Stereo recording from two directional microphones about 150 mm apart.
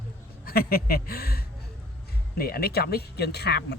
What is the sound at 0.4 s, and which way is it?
Speech, 85° left.